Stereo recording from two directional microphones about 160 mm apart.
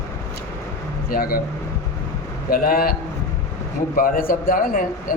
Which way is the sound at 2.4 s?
65° left (ahead or behind).